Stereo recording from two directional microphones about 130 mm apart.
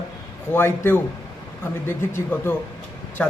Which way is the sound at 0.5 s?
15° left (ahead or behind).